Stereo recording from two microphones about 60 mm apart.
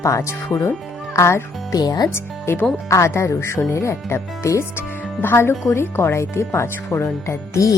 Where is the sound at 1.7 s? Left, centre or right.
Left.